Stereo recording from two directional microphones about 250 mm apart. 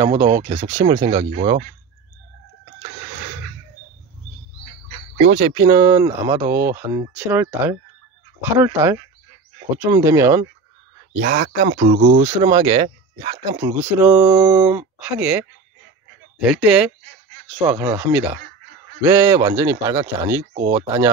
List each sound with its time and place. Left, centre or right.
0.3 s speech: right
5.1 s speech: right; by 10.5 s centre
11.1 s speech: right
12.2 s speech: centre